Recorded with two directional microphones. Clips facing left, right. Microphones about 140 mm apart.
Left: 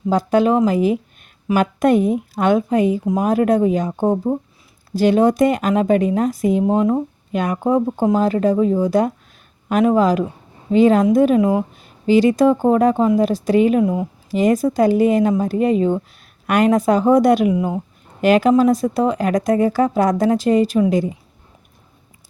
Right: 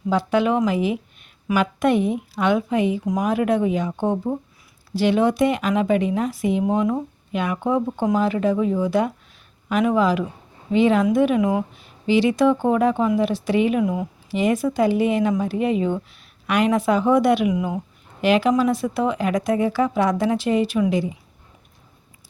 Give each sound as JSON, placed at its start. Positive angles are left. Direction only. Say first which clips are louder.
{"t": 0.1, "sound": "speech", "louder": "left 4 dB", "side_deg": 40}
{"t": 11.8, "sound": "speech", "louder": "left 5 dB", "side_deg": 40}
{"t": 14.3, "sound": "speech", "louder": "left 4 dB", "side_deg": 40}
{"t": 18.2, "sound": "speech", "louder": "left 5 dB", "side_deg": 45}